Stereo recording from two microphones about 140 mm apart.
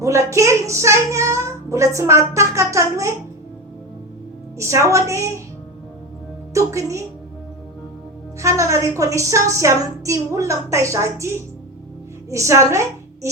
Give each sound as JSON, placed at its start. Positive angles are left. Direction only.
{"t": 0.0, "sound": "speech", "side_deg": -20}
{"t": 4.5, "sound": "speech", "side_deg": -20}
{"t": 6.5, "sound": "a woman's voice", "side_deg": -20}
{"t": 8.4, "sound": "speech", "side_deg": -20}